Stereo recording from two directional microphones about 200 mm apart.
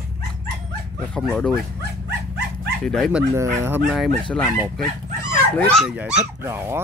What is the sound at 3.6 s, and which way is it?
Speech, 10° right (ahead or behind).